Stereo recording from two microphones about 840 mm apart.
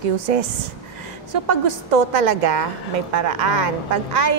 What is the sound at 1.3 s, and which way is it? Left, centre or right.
A woman's voice, right.